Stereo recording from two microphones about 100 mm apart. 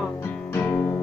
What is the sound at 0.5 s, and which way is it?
Music, 20° left (ahead or behind).